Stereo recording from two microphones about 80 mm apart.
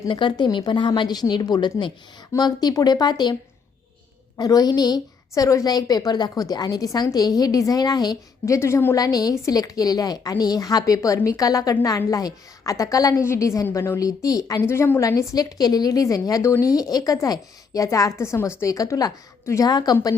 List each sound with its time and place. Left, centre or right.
0.1 s a woman's voice: left
4.4 s speech: left
5.3 s a woman's voice: left
8.4 s a woman's voice: left
9.0 s a woman's voice: left
13.2 s a woman's voice: left
14.0 s a woman's voice: left
15.3 s a woman's voice: left
19.6 s speech: left